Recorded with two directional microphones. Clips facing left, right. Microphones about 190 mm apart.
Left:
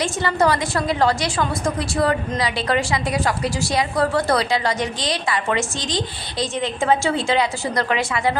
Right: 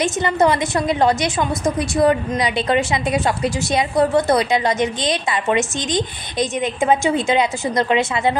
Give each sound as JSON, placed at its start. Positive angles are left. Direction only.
{"t": 0.0, "sound": "a woman's voice", "side_deg": -20}